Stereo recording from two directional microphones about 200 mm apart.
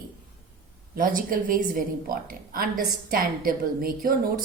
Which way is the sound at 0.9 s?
45° right (ahead or behind).